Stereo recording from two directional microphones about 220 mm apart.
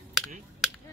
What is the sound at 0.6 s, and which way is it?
Finger snapping, centre (ahead or behind).